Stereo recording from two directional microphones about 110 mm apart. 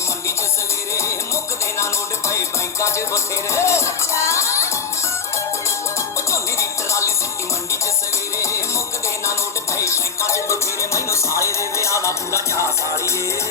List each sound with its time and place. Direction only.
1.8 s music: 25° left (ahead or behind)
6.3 s music: 25° left (ahead or behind)
9.7 s music: 25° left (ahead or behind)